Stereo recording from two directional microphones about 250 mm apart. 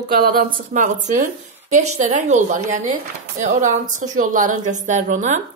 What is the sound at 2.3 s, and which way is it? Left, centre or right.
Speech, right.